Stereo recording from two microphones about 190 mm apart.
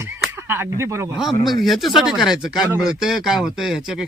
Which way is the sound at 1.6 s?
Centre (ahead or behind).